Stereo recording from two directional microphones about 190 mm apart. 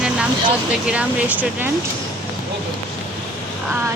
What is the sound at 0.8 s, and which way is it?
Speech, 5° right (ahead or behind).